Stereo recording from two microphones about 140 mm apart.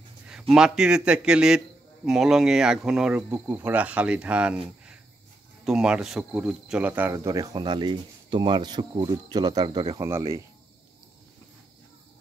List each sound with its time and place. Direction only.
0.3 s a man's voice: 5° right (ahead or behind)
5.7 s speech: 5° right (ahead or behind); by 9.9 s 30° right (ahead or behind)
9.9 s speech: 20° right (ahead or behind)